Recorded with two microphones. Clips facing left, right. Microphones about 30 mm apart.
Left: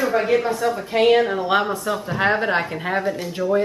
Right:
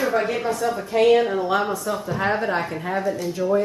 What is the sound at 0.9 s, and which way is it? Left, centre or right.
A woman's voice, left.